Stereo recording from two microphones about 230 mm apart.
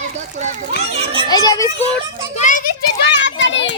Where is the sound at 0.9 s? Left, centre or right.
Right.